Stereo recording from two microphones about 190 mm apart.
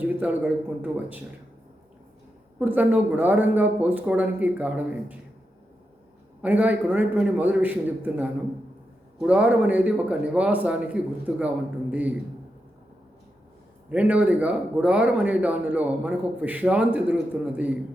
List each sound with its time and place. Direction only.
0.0 s speech: 10° right (ahead or behind)
2.6 s speech: 10° right (ahead or behind)
6.4 s speech: 10° right (ahead or behind)
13.9 s speech: 5° right (ahead or behind)